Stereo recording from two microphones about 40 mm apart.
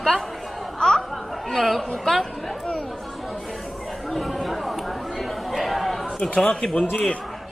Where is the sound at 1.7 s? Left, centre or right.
Centre.